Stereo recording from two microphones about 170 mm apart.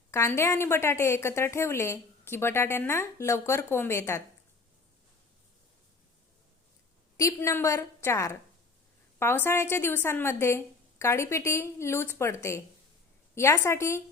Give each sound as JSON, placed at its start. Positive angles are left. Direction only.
{"t": 0.1, "sound": "a woman's voice", "side_deg": 15}
{"t": 7.2, "sound": "a woman's voice", "side_deg": 20}